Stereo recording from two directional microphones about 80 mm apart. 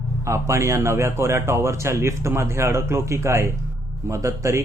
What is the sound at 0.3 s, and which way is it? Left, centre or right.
Speech, right.